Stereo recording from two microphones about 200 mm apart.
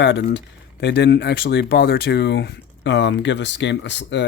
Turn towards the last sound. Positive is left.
turn(degrees=60)  # may be behind; listen again after turning